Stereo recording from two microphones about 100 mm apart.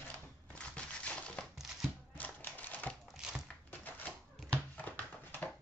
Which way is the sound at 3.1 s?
5° right (ahead or behind).